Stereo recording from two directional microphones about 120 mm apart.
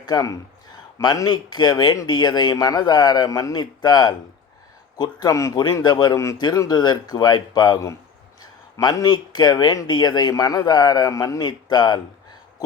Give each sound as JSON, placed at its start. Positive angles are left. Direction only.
{"t": 0.0, "sound": "speech", "side_deg": 30}